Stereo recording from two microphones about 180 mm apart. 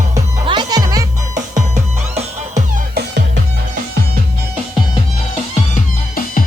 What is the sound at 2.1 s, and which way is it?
Music, 40° right (ahead or behind).